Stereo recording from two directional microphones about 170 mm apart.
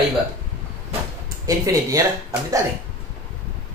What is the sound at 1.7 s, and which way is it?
Speech, 20° right (ahead or behind).